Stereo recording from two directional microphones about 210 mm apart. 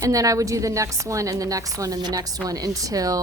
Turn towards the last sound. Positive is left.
turn(degrees=-15)  # may be behind; listen again after turning